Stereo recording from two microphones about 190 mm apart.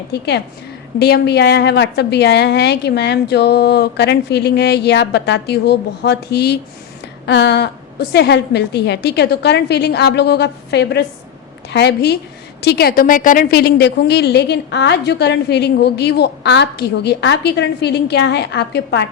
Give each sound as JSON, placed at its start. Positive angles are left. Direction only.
{"t": 0.1, "sound": "a woman's voice", "side_deg": 60}